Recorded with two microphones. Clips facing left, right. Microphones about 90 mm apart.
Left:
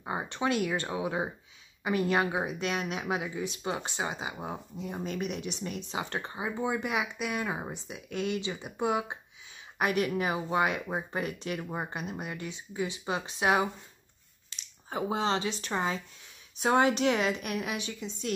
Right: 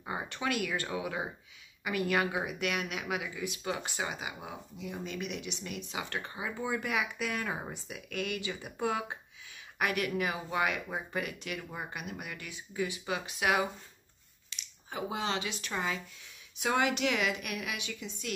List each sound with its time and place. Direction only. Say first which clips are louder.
0.0 s a woman's voice: left 4 dB; 25° left (ahead or behind)